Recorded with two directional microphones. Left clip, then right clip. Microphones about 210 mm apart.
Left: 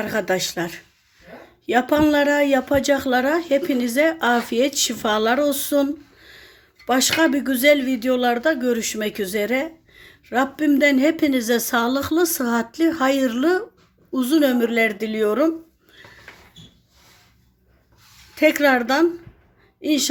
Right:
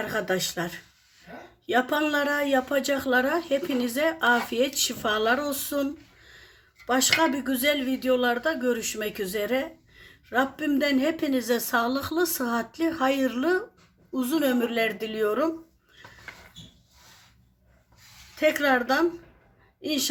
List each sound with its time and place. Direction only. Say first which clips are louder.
0.0 s speech: left 5 dB; 25° left (ahead or behind)
18.3 s a woman's voice: left 6 dB; 30° left (ahead or behind)